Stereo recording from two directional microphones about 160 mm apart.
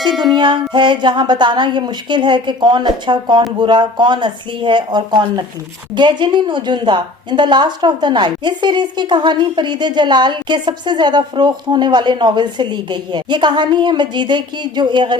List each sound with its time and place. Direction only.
0.0 s music: centre (ahead or behind)
0.3 s a woman's voice: 30° right (ahead or behind)